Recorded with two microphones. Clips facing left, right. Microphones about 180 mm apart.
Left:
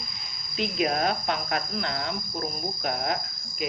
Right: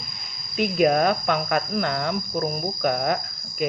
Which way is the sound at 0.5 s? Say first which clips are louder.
Right 7 dB; 55° right (ahead or behind).